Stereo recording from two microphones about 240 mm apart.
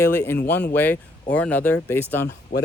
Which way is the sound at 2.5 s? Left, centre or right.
Left.